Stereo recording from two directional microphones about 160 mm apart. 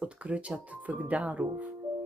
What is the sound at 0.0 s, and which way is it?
Speech, 5° right (ahead or behind).